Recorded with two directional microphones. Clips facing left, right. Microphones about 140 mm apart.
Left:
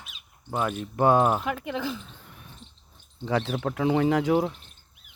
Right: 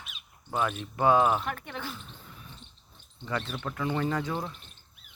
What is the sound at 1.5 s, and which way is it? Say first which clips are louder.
Speech: left 7 dB; 90° left.